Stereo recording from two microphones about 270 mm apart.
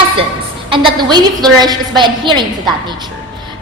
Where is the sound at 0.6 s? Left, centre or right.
Centre.